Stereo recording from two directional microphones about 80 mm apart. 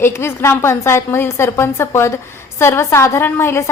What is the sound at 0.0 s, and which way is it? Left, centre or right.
A woman's voice, left.